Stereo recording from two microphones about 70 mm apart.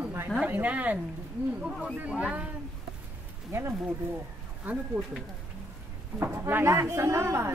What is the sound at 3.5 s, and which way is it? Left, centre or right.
Speech, right.